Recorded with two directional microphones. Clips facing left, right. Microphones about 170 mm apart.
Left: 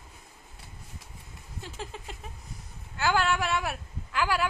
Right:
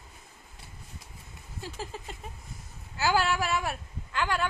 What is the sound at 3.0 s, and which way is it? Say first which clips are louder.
A woman's voice: even; 5° right (ahead or behind).